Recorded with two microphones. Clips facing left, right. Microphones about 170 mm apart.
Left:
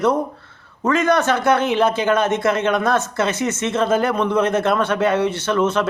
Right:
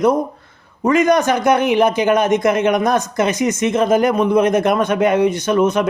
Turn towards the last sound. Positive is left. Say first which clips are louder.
# right 3 dB
turn(degrees=-15)  # may be behind; listen again after turning